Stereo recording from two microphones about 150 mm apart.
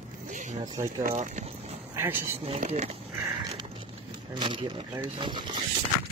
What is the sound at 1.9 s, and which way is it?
Speech, 15° right (ahead or behind).